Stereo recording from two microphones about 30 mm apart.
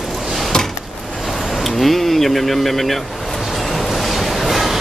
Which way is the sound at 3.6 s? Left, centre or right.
Centre.